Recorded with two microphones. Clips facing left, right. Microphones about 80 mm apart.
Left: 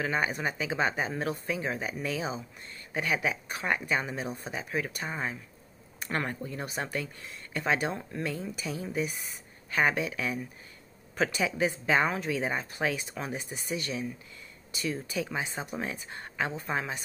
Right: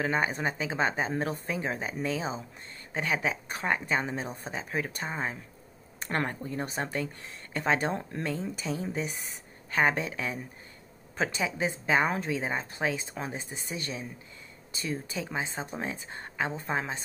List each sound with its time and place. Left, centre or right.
0.0 s speech: right